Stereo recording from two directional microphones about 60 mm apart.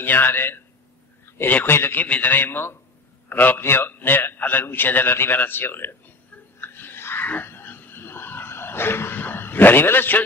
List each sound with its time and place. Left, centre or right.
0.0 s a man's voice: left
2.0 s a man's voice: left
6.6 s a sound: left